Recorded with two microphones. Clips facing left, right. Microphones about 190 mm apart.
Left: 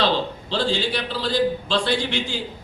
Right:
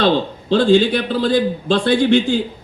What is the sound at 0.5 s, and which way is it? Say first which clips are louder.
A man's voice: right 11 dB; 50° right (ahead or behind).